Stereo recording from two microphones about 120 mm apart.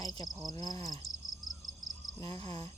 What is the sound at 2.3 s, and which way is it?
Speech, 50° right (ahead or behind).